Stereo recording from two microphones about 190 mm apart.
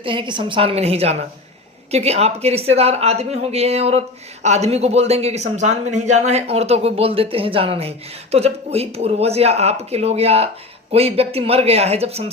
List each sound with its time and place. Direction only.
0.0 s a woman's voice: 25° right (ahead or behind)